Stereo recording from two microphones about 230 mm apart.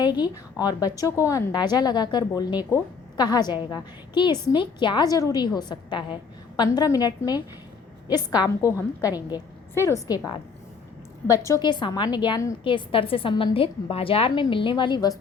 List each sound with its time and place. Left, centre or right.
0.0 s a woman's voice: centre